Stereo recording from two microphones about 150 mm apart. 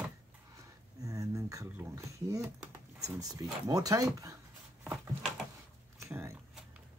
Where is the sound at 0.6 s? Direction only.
25° right (ahead or behind).